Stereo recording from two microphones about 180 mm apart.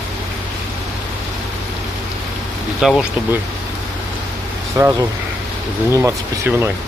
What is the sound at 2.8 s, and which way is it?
Speech, centre (ahead or behind).